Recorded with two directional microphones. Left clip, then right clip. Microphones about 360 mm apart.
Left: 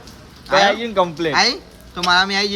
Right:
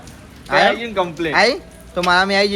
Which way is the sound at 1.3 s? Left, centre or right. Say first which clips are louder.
Right 2 dB; centre.